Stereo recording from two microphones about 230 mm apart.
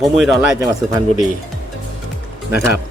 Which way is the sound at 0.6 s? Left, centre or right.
Centre.